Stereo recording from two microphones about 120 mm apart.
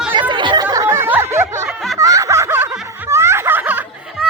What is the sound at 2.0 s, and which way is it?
Snicker, 25° right (ahead or behind).